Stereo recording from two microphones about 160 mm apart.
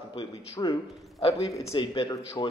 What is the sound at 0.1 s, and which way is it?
A man's voice, 30° left (ahead or behind).